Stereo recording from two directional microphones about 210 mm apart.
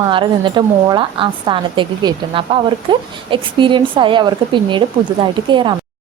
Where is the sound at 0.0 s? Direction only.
25° right (ahead or behind).